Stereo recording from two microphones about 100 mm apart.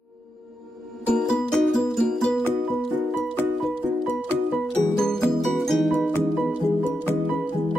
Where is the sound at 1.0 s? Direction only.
10° left (ahead or behind).